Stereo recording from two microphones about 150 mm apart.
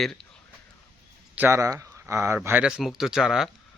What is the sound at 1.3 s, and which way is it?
Speech, 15° right (ahead or behind).